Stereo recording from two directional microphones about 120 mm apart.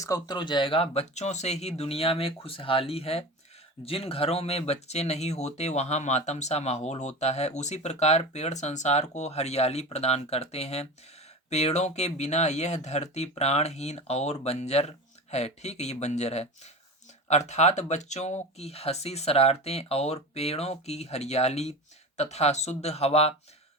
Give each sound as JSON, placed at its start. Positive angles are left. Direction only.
{"t": 0.0, "sound": "speech", "side_deg": 30}